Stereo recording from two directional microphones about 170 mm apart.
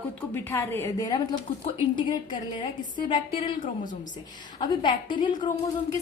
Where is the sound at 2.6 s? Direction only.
25° left (ahead or behind).